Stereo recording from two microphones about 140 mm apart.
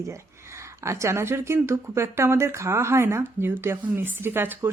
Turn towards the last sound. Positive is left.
turn(degrees=-15)  # may be behind; listen again after turning